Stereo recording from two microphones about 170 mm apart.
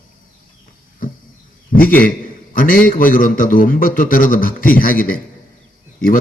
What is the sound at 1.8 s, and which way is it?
A man's voice, 55° left (ahead or behind).